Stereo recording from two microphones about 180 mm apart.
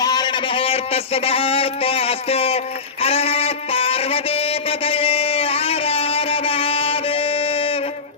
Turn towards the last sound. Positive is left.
turn(degrees=30)  # may be behind; listen again after turning